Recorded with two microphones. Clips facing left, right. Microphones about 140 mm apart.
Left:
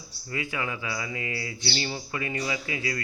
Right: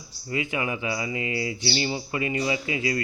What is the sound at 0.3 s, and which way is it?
Speech, 20° right (ahead or behind).